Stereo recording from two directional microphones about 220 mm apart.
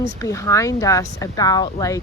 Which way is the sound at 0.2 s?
15° left (ahead or behind).